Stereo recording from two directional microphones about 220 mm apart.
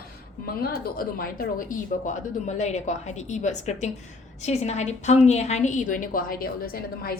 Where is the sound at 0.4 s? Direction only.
45° left (ahead or behind).